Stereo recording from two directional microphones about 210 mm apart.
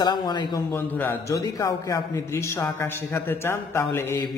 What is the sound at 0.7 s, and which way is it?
A man's voice, 10° left (ahead or behind).